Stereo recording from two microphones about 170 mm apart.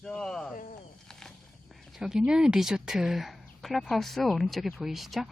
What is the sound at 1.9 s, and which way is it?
Speech, 5° right (ahead or behind).